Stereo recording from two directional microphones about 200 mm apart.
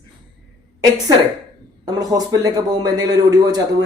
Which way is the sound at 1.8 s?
20° right (ahead or behind).